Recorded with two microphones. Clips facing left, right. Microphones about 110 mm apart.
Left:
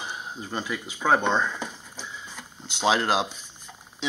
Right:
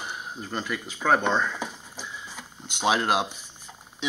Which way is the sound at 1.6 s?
10° right (ahead or behind).